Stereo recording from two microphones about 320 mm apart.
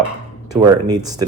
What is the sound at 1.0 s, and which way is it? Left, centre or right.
Speech, centre.